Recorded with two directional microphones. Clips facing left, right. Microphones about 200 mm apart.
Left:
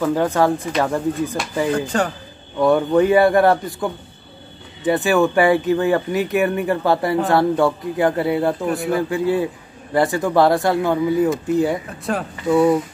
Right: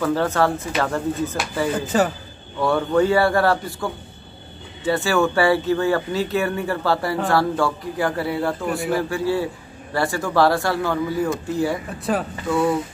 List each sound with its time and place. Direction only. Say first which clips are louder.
0.0 s speech: left 2 dB; 15° left (ahead or behind)
1.7 s speech: right 2 dB; 5° right (ahead or behind)
2.6 s speech: left 4 dB; 20° left (ahead or behind)
8.6 s speech: left 2 dB; centre (ahead or behind)
8.9 s speech: left 3 dB; 20° left (ahead or behind)
12.1 s speech: right 1 dB; centre (ahead or behind)
12.4 s speech: left 6 dB; 20° left (ahead or behind)